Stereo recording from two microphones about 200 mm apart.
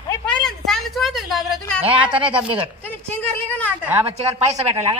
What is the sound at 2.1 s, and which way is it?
Speech, 25° right (ahead or behind).